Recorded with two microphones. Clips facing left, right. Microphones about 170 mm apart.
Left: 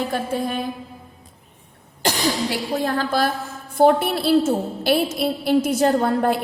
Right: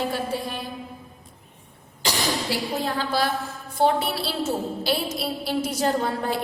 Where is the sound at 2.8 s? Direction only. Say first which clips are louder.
Left 4 dB; 45° left (ahead or behind).